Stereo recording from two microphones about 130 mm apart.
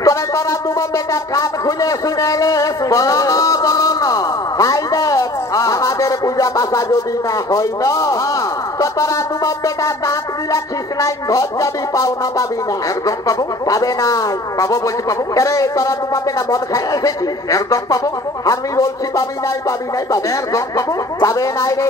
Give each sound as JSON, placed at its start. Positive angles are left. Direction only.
{"t": 0.0, "sound": "speech", "side_deg": 25}